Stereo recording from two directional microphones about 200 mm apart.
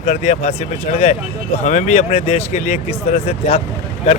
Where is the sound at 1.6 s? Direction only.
35° left (ahead or behind).